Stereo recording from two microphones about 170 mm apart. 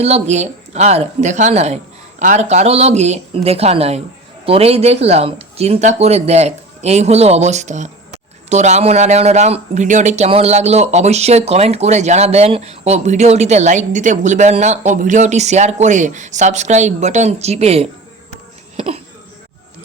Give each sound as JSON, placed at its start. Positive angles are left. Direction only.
{"t": 0.0, "sound": "a man's voice", "side_deg": -40}